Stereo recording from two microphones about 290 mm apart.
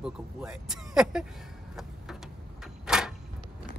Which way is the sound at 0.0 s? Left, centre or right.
Centre.